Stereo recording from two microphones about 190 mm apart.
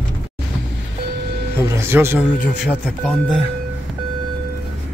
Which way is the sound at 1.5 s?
15° right (ahead or behind).